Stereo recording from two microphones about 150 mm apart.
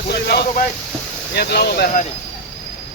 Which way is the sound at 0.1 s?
90° left.